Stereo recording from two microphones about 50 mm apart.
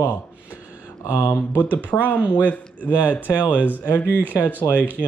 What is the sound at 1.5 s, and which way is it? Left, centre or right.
Speech, left.